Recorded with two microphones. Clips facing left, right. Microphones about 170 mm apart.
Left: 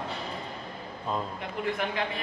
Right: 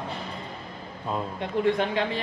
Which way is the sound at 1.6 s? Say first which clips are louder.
Right 6 dB; 30° right (ahead or behind).